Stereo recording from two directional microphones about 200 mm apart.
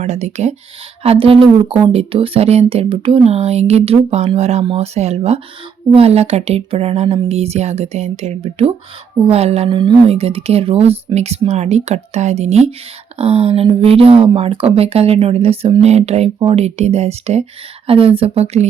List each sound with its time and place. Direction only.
0.0 s speech: 35° right (ahead or behind)